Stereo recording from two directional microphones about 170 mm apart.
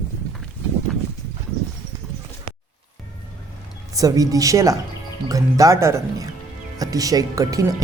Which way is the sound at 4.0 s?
20° right (ahead or behind).